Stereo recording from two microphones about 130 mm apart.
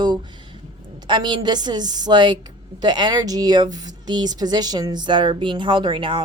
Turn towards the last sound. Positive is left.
turn(degrees=-40)  # may be behind; listen again after turning